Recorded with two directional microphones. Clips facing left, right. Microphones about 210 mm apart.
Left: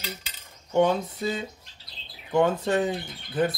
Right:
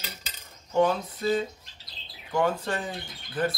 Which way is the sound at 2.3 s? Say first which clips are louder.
Left 5 dB; 20° left (ahead or behind).